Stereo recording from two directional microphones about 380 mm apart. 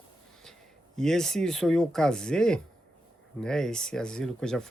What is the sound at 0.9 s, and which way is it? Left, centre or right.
Speech, centre.